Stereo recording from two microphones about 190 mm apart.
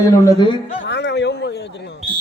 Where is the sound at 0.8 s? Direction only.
65° left (ahead or behind).